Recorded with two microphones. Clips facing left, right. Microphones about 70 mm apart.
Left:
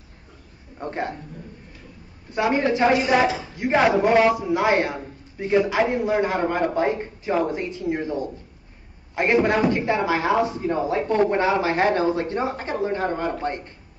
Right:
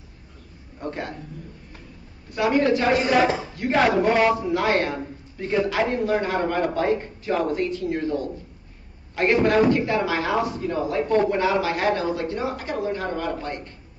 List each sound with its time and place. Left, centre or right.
0.7 s a man's voice: left
2.3 s a man's voice: left